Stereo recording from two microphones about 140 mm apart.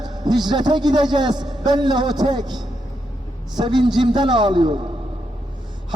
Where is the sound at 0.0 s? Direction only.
30° right (ahead or behind).